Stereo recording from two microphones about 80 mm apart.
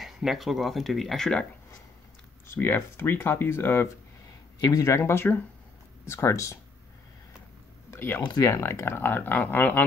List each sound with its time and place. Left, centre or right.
0.0 s speech: centre
2.4 s speech: left
4.6 s speech: left
7.9 s a sound: left
8.2 s speech: left
8.5 s speech: left